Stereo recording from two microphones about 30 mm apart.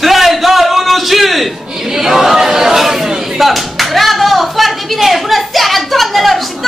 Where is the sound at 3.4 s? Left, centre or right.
Centre.